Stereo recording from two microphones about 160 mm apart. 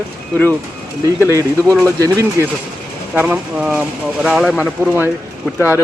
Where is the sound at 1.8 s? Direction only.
20° right (ahead or behind).